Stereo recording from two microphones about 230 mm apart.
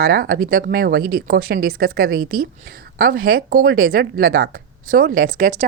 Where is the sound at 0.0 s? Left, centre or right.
Right.